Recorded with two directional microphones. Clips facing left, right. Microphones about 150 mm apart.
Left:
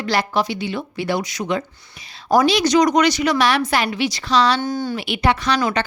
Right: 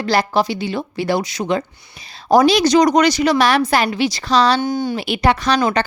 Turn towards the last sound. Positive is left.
turn(degrees=-40)  # may be behind; listen again after turning